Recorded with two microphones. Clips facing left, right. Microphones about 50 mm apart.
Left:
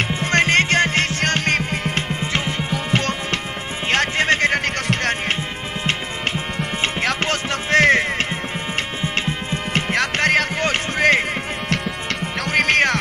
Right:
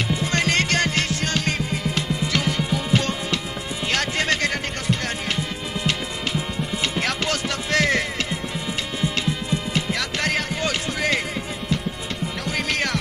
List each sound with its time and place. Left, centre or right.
0.1 s music: left
2.7 s music: left
5.9 s music: left
12.4 s music: left